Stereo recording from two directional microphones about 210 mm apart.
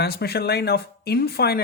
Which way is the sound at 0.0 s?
50° left (ahead or behind).